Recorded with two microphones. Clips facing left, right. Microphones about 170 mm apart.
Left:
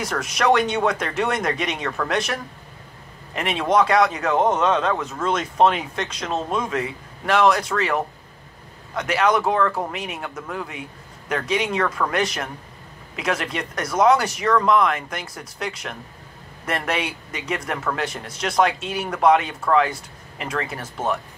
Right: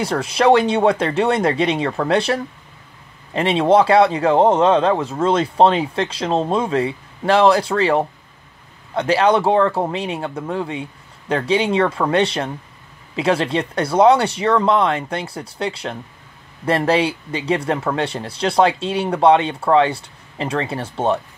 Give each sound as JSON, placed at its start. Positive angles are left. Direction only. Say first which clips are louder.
{"t": 0.0, "sound": "speech", "louder": "right 6 dB", "side_deg": -30}